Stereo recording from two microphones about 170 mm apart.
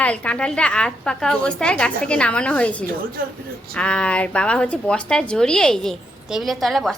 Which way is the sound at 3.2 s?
60° right (ahead or behind).